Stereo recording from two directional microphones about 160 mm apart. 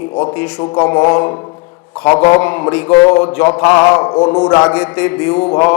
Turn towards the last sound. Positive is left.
turn(degrees=20)  # may be behind; listen again after turning